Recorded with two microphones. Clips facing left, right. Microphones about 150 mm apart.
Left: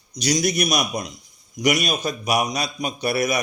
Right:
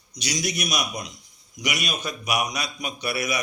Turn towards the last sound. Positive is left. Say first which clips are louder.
# left 6 dB
turn(degrees=45)  # may be behind; listen again after turning